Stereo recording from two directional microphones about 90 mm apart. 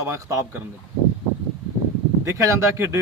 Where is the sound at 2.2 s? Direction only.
35° right (ahead or behind).